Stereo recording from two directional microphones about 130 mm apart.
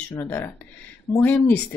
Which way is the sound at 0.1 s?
15° left (ahead or behind).